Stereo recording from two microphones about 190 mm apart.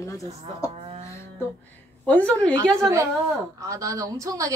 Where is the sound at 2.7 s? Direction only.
15° right (ahead or behind).